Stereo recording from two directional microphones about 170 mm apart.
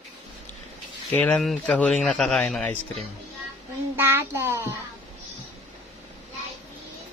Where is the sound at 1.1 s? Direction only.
5° left (ahead or behind).